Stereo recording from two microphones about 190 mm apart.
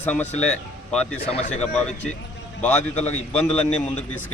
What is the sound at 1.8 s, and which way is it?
Speech, 5° left (ahead or behind).